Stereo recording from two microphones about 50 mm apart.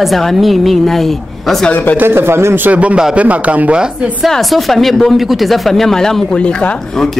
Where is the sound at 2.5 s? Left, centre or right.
Right.